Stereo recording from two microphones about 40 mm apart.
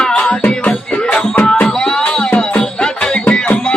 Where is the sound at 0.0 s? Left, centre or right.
Left.